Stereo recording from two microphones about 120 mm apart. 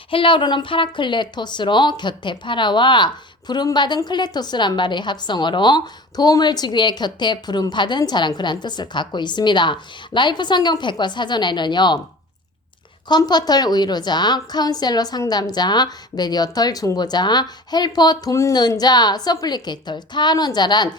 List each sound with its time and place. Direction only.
0.1 s speech: 45° left (ahead or behind)
13.1 s speech: 35° left (ahead or behind)